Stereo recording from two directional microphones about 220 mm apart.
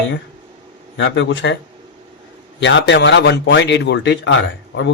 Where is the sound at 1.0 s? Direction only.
55° left (ahead or behind).